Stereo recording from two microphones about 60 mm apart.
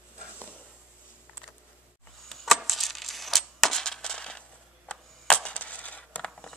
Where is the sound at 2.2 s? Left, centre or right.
Centre; by 6.2 s left.